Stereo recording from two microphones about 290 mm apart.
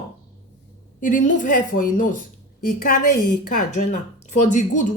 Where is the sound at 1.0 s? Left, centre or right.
Left.